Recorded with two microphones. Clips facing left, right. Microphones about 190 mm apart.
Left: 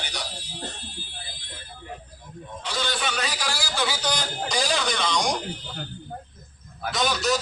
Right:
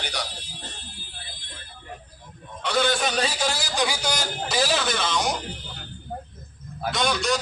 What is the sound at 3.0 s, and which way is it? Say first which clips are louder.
A man's voice: right 4 dB; 35° right (ahead or behind).